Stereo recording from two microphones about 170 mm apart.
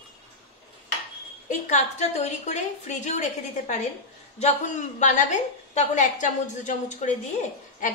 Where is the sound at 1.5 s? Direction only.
45° left (ahead or behind).